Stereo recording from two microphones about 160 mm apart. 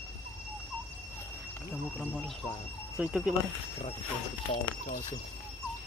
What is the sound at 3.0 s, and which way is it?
Speech, 5° right (ahead or behind).